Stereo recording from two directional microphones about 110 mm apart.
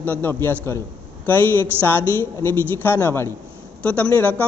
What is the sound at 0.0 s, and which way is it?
A man's voice, 15° left (ahead or behind).